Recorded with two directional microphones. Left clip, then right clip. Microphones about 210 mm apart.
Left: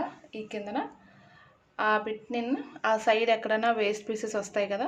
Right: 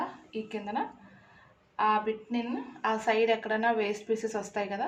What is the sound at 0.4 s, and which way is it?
A woman's voice, 55° left (ahead or behind).